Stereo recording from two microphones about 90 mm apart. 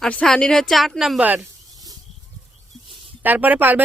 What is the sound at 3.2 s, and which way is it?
Speech, 20° right (ahead or behind).